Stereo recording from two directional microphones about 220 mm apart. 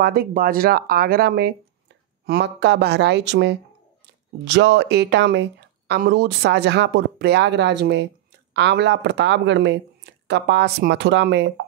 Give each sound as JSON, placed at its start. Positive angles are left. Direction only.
{"t": 0.0, "sound": "speech", "side_deg": -45}